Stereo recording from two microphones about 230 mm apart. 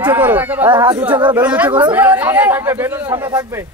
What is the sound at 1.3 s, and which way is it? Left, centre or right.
Speech, centre.